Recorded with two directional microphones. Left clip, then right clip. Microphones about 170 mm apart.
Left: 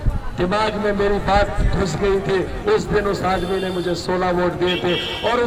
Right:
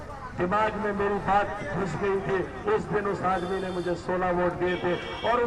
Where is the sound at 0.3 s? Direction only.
45° left (ahead or behind).